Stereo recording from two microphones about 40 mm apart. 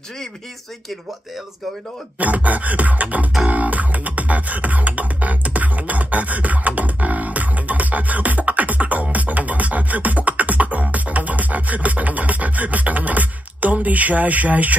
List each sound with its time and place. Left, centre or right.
2.1 s beatboxing: right
3.4 s music: right
9.1 s beatboxing: right